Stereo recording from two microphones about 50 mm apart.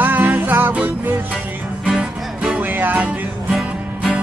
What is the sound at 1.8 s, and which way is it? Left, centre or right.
Music, centre.